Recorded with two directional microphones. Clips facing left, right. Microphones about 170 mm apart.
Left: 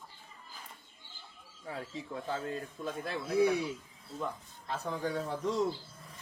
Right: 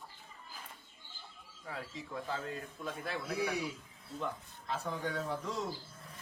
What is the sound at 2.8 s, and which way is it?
Speech, 25° left (ahead or behind).